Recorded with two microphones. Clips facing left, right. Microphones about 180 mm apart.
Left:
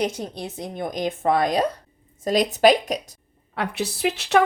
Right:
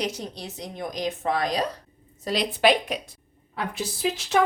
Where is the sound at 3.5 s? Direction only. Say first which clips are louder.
Left 4 dB; 70° left (ahead or behind).